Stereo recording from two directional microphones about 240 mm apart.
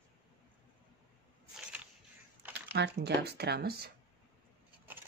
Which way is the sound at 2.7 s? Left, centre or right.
Right.